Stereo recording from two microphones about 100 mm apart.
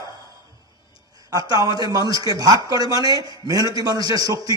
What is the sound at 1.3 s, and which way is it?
A man's voice, 35° right (ahead or behind).